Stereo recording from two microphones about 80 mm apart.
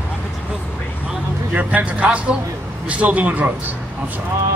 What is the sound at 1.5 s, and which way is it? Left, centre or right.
A man's voice, centre.